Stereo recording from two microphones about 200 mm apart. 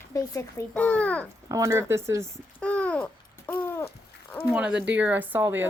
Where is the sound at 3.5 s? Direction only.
10° left (ahead or behind).